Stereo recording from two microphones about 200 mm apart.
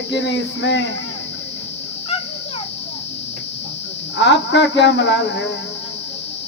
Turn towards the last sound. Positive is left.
turn(degrees=60)  # may be behind; listen again after turning